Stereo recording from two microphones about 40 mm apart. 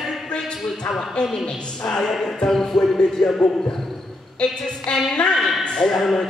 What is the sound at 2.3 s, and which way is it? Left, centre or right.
Music, centre.